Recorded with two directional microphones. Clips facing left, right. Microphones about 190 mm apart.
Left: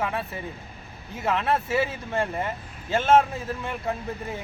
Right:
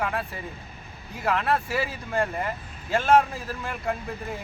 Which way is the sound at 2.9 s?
Centre (ahead or behind).